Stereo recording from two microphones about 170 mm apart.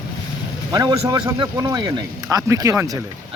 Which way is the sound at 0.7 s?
25° right (ahead or behind).